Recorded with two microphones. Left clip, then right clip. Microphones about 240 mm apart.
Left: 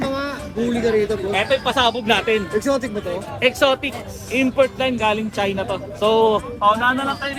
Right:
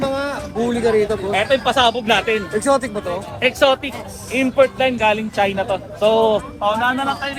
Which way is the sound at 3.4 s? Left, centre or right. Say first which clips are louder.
Right 2 dB; centre.